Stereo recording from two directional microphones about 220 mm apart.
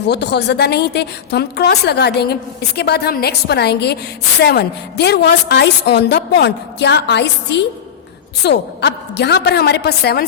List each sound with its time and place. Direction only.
0.1 s a woman's voice: 50° left (ahead or behind)